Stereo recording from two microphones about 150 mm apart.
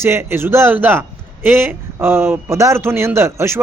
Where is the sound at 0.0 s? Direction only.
15° right (ahead or behind).